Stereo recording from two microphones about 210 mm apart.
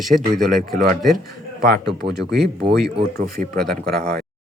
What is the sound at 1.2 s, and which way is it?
A man's voice, 45° right (ahead or behind).